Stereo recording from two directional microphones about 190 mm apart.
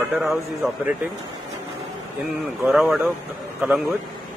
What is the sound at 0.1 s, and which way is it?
Speech, centre (ahead or behind).